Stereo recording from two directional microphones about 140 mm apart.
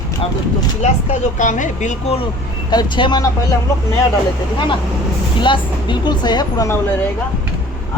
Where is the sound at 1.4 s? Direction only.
65° left (ahead or behind).